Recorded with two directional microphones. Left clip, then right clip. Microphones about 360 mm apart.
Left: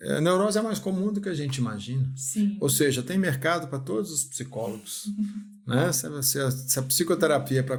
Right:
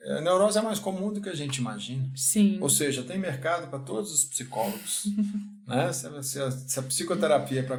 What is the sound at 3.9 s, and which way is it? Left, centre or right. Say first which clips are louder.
Speech: right 1 dB; left.